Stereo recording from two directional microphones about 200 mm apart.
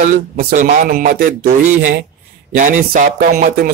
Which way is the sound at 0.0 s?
45° right (ahead or behind).